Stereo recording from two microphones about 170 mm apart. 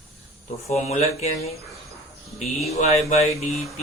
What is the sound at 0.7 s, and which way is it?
Speech, 40° left (ahead or behind).